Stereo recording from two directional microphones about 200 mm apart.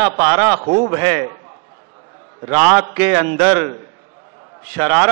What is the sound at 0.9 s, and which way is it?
Speech, 15° right (ahead or behind).